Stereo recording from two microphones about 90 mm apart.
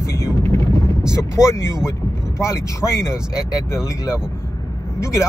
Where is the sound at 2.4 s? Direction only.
30° left (ahead or behind).